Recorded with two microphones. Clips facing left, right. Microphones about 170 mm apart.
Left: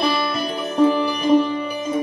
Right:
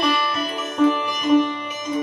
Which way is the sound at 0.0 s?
35° left (ahead or behind).